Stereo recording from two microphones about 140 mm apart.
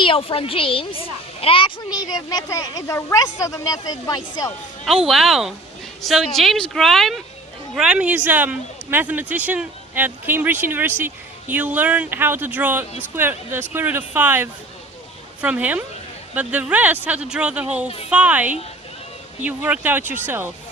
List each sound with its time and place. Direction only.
0.0 s speech: 40° left (ahead or behind)
5.0 s speech: centre (ahead or behind)